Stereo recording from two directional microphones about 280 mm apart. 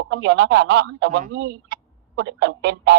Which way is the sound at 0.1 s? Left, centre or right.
Right.